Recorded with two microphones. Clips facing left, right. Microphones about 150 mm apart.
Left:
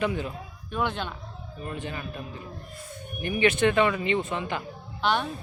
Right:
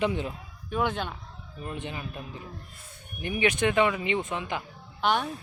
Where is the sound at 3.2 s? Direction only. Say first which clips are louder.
Left 3 dB; 15° right (ahead or behind).